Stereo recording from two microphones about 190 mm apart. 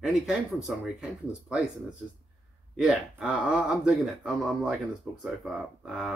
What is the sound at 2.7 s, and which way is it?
Speech, 5° right (ahead or behind).